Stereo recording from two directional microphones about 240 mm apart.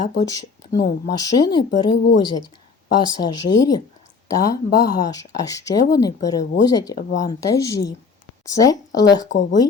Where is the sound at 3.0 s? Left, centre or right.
Centre.